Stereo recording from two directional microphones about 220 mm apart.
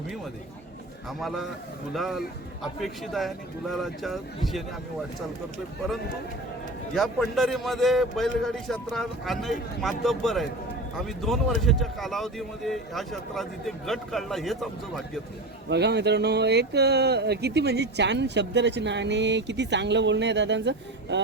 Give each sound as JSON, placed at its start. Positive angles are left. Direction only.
{"t": 1.9, "sound": "speech", "side_deg": 0}
{"t": 6.9, "sound": "speech", "side_deg": 0}
{"t": 15.7, "sound": "speech", "side_deg": -50}